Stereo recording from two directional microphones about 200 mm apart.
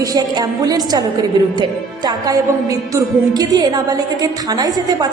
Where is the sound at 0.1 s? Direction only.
20° right (ahead or behind).